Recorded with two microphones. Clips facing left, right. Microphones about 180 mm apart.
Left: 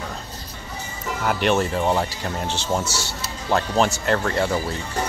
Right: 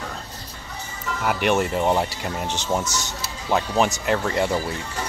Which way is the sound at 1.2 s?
5° right (ahead or behind).